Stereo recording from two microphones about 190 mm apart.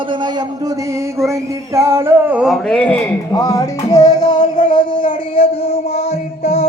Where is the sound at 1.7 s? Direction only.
15° right (ahead or behind); by 3.0 s 5° left (ahead or behind).